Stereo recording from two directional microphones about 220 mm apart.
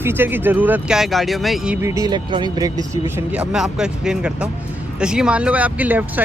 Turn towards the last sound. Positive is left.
turn(degrees=-10)  # may be behind; listen again after turning